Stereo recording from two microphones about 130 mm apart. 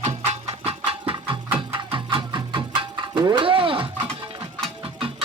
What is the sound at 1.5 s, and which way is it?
Music, 40° right (ahead or behind).